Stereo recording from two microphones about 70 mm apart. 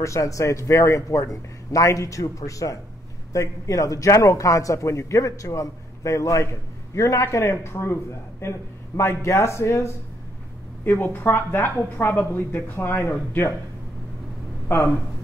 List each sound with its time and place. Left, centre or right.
0.0 s a man's voice: left